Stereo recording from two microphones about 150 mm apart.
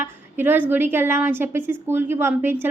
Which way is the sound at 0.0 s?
15° right (ahead or behind).